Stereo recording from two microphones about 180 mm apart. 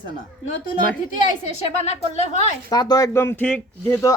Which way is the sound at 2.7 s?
20° left (ahead or behind).